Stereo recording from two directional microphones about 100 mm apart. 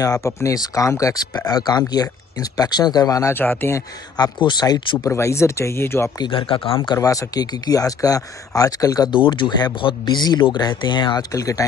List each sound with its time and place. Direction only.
0.0 s speech: 35° left (ahead or behind)
3.3 s speech: 25° left (ahead or behind)
4.2 s speech: 45° left (ahead or behind)
4.9 s speech: 30° left (ahead or behind)
6.1 s speech: 55° left (ahead or behind)
7.0 s speech: 35° left (ahead or behind)
9.1 s speech: 55° left (ahead or behind)
11.3 s speech: 35° left (ahead or behind)